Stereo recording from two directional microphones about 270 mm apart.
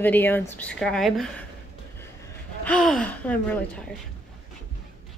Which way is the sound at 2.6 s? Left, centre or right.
Centre.